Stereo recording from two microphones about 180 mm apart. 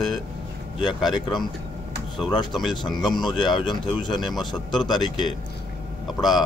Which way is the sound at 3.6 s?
25° left (ahead or behind).